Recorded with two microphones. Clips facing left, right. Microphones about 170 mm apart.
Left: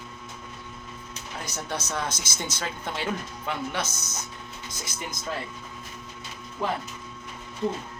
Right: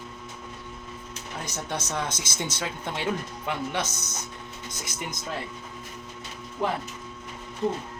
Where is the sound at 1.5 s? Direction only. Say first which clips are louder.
Even; 25° right (ahead or behind).